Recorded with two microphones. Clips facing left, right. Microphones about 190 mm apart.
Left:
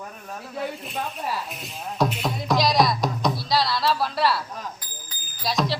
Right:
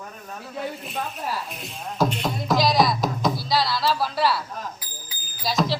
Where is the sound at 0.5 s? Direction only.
Centre (ahead or behind).